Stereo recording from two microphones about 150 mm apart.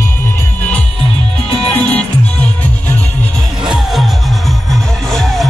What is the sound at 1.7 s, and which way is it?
Music, 10° left (ahead or behind).